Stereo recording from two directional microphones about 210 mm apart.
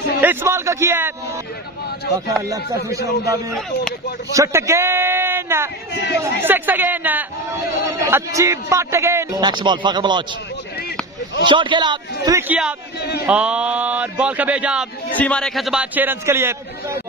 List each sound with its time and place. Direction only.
0.2 s a man's voice: 10° right (ahead or behind)
2.2 s a man's voice: 15° right (ahead or behind)
4.3 s a man's voice: 15° right (ahead or behind)
5.9 s speech: 55° left (ahead or behind)
6.4 s a man's voice: 10° right (ahead or behind)
11.4 s a man's voice: 25° right (ahead or behind); by 14.9 s 5° right (ahead or behind)
15.1 s speech: 5° left (ahead or behind); by 17.0 s 10° right (ahead or behind)